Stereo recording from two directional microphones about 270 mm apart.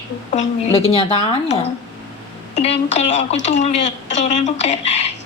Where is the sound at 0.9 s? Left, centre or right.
Left.